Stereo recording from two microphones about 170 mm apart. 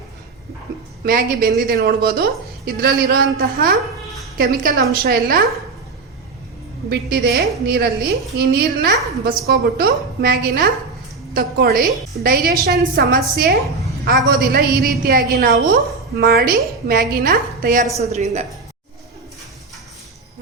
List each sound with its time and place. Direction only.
1.0 s a woman's voice: 60° right (ahead or behind)
6.9 s a woman's voice: 65° right (ahead or behind)
17.9 s a woman's voice: 40° right (ahead or behind)